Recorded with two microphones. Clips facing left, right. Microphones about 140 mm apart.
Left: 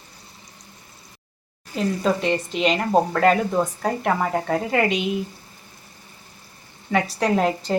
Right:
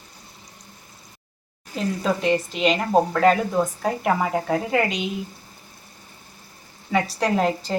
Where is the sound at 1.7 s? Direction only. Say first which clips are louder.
Left 2 dB; centre (ahead or behind).